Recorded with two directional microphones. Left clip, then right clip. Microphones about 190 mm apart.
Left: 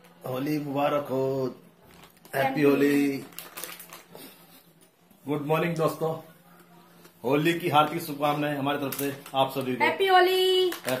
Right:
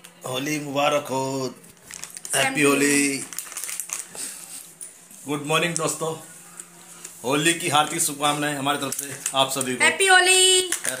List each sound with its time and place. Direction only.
0.2 s a man's voice: 10° right (ahead or behind)
2.5 s a man's voice: 15° right (ahead or behind)
5.2 s a man's voice: 10° right (ahead or behind)
7.2 s a man's voice: 10° right (ahead or behind)
9.8 s speech: 10° left (ahead or behind)